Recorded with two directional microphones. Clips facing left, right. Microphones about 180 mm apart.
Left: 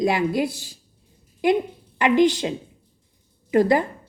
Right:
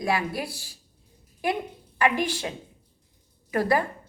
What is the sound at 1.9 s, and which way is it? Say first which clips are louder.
A woman's voice: left 7 dB; 20° left (ahead or behind).